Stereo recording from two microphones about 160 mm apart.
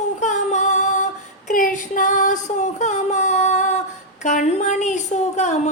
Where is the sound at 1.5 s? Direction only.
55° left (ahead or behind).